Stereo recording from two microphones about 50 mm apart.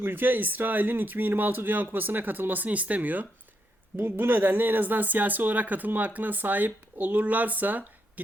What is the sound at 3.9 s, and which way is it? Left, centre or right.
Speech, right.